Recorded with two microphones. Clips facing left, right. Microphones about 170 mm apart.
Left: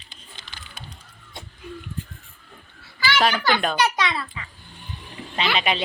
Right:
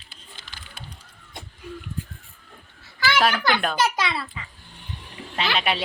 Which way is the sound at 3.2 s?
5° right (ahead or behind).